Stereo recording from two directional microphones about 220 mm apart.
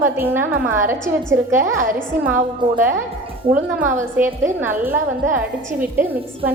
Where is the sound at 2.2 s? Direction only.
10° right (ahead or behind).